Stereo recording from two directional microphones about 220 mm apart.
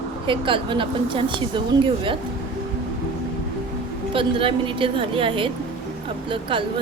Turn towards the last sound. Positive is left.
turn(degrees=-25)  # may be behind; listen again after turning